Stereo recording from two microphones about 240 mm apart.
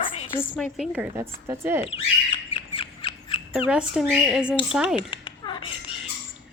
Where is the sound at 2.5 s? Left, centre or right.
Left.